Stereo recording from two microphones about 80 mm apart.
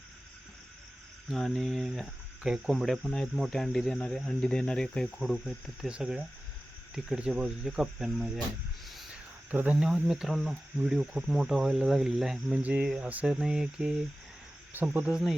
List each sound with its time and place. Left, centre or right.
1.3 s speech: centre
2.7 s speech: centre
5.9 s speech: centre
9.5 s speech: centre
12.5 s speech: centre
13.3 s speech: centre
14.7 s cricket: right